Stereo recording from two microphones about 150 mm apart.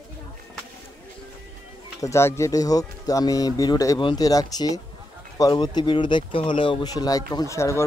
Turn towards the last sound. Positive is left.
turn(degrees=20)  # may be behind; listen again after turning